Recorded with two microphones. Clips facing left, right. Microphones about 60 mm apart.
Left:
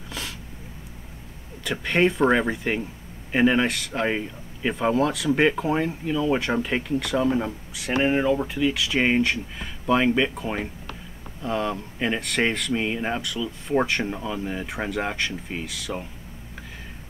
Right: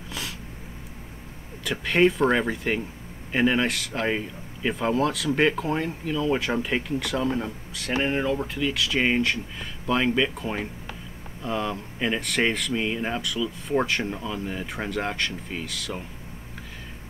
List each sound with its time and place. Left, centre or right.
1.6 s speech: centre